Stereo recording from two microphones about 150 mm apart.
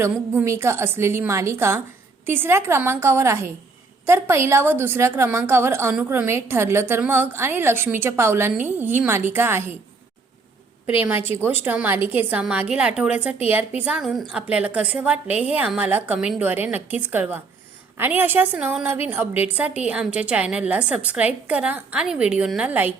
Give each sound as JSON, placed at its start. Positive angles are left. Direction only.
{"t": 0.0, "sound": "a woman's voice", "side_deg": -15}
{"t": 11.0, "sound": "a woman's voice", "side_deg": -15}